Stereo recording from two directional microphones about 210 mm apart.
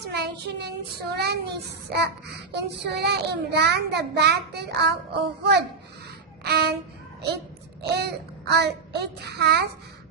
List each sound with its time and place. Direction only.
0.1 s child singing: 50° right (ahead or behind)
6.4 s a sound: 50° right (ahead or behind)
7.8 s a child's voice: 50° right (ahead or behind)